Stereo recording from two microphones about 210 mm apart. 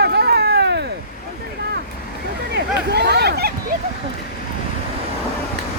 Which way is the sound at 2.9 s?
50° right (ahead or behind).